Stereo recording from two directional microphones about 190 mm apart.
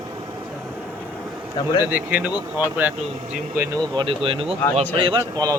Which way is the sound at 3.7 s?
25° right (ahead or behind).